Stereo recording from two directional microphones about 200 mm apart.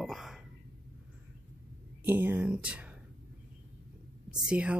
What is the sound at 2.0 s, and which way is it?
Speech, 10° right (ahead or behind).